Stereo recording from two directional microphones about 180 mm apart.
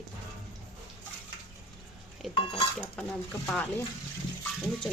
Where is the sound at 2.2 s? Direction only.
Centre (ahead or behind).